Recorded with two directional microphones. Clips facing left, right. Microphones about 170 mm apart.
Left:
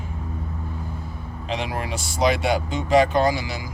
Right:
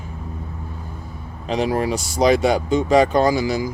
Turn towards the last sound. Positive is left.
turn(degrees=-40)  # may be behind; listen again after turning